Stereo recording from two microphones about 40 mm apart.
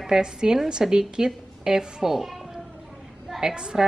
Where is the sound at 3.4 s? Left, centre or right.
Centre.